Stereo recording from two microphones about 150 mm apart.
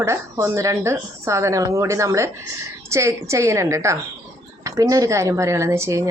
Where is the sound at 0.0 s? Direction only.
20° right (ahead or behind).